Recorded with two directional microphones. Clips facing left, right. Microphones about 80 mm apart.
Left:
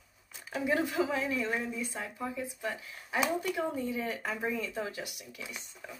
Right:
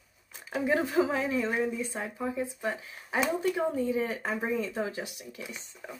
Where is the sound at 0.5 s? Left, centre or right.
Right.